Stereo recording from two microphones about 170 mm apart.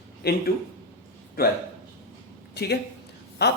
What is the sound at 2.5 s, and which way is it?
Speech, 70° left (ahead or behind).